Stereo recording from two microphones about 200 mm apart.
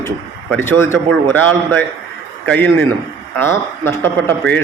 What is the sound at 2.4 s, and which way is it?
Speech, 10° left (ahead or behind).